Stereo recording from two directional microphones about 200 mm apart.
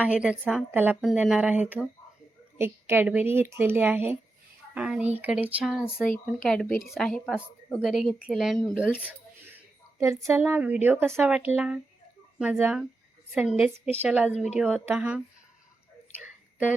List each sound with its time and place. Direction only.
0.0 s a woman's voice: 5° right (ahead or behind)
14.3 s a woman's voice: 35° left (ahead or behind)
14.8 s a woman's voice: 5° right (ahead or behind)
16.2 s whispering: 5° right (ahead or behind)